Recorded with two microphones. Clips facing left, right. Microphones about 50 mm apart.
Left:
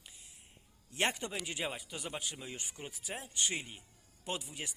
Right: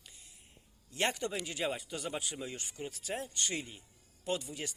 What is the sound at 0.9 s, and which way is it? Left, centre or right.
Speech, left.